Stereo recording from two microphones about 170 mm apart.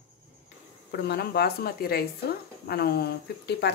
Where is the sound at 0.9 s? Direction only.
70° left (ahead or behind).